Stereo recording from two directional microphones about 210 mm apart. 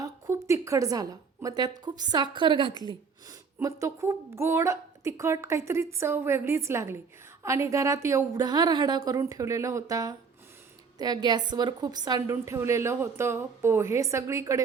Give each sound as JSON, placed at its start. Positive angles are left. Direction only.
{"t": 0.0, "sound": "a woman's voice", "side_deg": -15}